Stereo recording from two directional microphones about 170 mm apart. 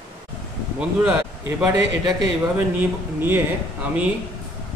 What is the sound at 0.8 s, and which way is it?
Speech, 10° right (ahead or behind).